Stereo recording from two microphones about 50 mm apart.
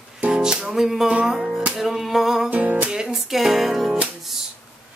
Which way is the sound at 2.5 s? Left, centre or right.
Right.